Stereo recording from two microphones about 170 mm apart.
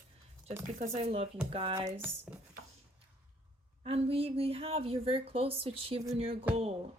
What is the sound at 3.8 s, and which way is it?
A woman's voice, 35° right (ahead or behind).